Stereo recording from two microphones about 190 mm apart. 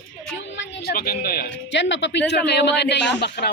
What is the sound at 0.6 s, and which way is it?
Speech, 55° left (ahead or behind).